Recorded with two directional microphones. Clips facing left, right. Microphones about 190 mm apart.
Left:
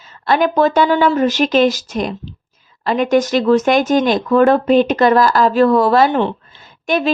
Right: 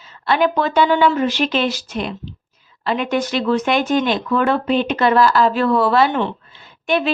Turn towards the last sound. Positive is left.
turn(degrees=40)  # may be behind; listen again after turning